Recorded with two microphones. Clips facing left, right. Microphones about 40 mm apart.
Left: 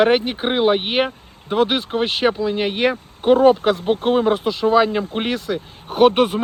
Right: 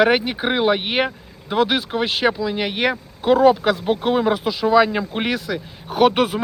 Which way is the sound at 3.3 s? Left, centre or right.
Left.